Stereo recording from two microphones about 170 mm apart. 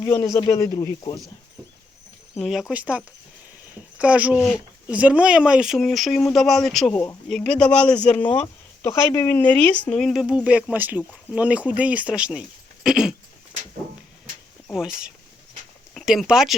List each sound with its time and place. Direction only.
0.0 s speech: 15° left (ahead or behind)
2.4 s speech: centre (ahead or behind)
6.9 s speech: 20° left (ahead or behind)
7.3 s speech: 5° left (ahead or behind)
14.7 s speech: 5° right (ahead or behind)